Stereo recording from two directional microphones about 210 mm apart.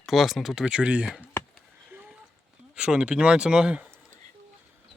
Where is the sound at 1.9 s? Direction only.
10° right (ahead or behind).